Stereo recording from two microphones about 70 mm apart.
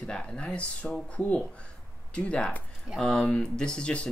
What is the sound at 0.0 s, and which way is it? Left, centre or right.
Speech, centre.